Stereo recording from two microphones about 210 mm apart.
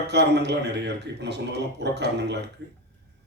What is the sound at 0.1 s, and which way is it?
A man's voice, 55° right (ahead or behind).